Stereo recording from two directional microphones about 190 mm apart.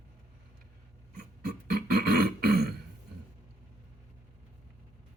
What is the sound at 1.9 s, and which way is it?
Throat clearing, 55° right (ahead or behind).